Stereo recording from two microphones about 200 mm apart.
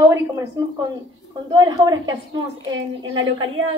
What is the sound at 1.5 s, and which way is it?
Speech, 20° right (ahead or behind).